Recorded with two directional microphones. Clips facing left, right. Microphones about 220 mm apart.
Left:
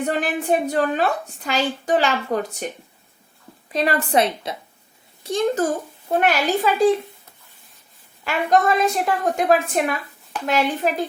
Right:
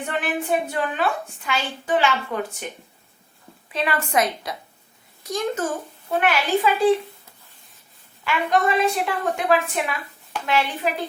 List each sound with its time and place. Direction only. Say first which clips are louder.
0.0 s a woman's voice: left 3 dB; 40° left (ahead or behind)
3.7 s a woman's voice: left 4 dB; 40° left (ahead or behind)
6.1 s a woman's voice: left 2 dB; 40° left (ahead or behind)
8.2 s a woman's voice: left 2 dB; 45° left (ahead or behind)